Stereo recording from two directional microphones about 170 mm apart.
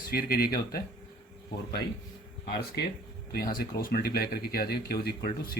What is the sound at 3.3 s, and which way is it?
Speech, 60° left (ahead or behind).